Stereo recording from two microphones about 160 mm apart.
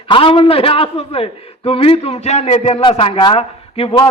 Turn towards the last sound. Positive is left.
turn(degrees=35)  # may be behind; listen again after turning